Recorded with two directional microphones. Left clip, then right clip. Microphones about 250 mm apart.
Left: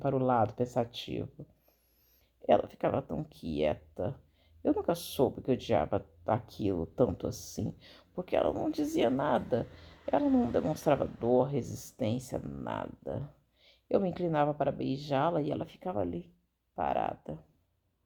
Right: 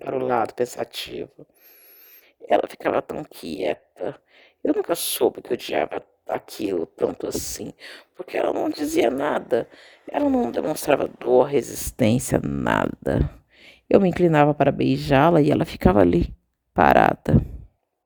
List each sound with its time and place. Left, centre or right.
0.1 s speech: right
2.6 s speech: right